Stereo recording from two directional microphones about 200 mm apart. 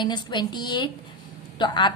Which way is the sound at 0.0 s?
20° left (ahead or behind).